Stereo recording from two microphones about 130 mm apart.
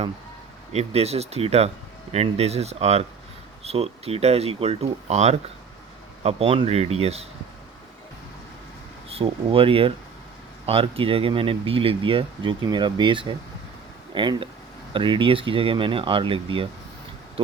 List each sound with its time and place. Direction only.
0.7 s speech: 55° right (ahead or behind)
6.2 s speech: 45° right (ahead or behind)
9.0 s speech: 50° right (ahead or behind)